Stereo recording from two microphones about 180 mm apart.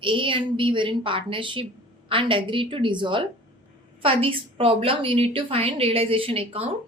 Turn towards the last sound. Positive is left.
turn(degrees=-30)  # may be behind; listen again after turning